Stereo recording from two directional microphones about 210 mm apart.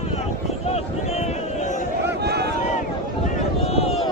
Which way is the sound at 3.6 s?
30° left (ahead or behind).